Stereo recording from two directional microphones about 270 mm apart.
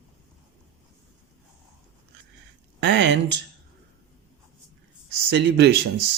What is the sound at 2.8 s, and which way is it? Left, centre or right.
Speech, right.